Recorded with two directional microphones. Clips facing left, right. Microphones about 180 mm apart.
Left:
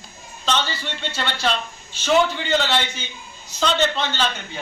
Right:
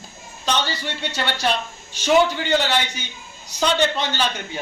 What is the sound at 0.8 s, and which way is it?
A man's voice, 15° right (ahead or behind).